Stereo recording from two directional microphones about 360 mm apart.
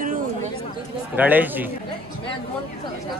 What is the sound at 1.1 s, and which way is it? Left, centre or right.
Speech, centre.